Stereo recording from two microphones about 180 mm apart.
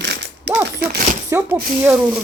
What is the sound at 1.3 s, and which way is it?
Speech, 10° right (ahead or behind).